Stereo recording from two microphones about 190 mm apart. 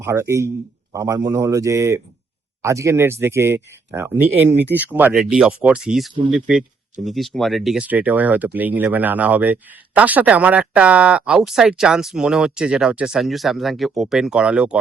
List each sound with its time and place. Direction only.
0.0 s speech: 15° right (ahead or behind)
4.4 s speech: 65° right (ahead or behind)
4.7 s speech: 10° right (ahead or behind)